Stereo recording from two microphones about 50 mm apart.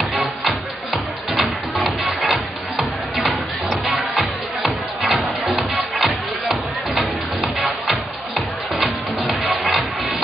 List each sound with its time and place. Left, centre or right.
0.1 s music: centre
7.5 s music: centre